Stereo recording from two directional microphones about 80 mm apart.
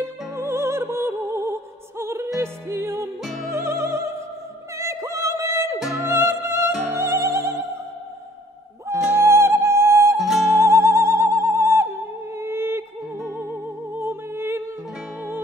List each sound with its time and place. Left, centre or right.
0.0 s music: right
3.2 s music: centre
3.5 s music: right
6.0 s opera: right
9.0 s music: right
10.1 s music: centre
10.6 s opera: right
13.3 s music: right